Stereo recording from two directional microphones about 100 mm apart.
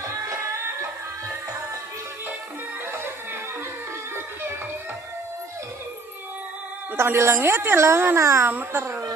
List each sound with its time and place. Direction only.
7.0 s a woman's voice: 25° right (ahead or behind)